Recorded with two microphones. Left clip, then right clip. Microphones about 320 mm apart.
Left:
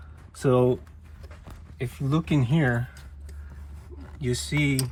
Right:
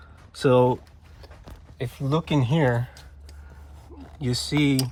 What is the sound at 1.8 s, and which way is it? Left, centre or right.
Speech, right.